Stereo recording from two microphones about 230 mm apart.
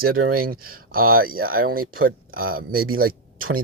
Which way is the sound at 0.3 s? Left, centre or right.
Right.